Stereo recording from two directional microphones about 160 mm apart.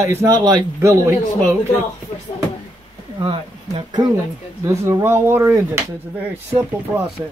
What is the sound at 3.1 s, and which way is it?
Speech, 35° right (ahead or behind).